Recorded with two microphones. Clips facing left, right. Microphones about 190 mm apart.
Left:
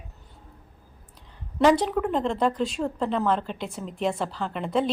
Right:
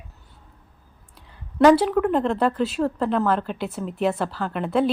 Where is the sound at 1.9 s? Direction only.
60° right (ahead or behind).